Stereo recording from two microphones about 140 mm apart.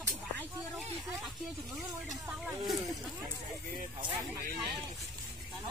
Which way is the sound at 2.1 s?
Centre (ahead or behind).